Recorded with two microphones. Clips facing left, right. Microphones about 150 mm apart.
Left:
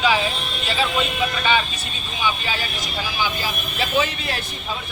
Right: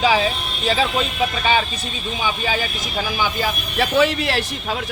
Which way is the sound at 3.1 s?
60° right (ahead or behind).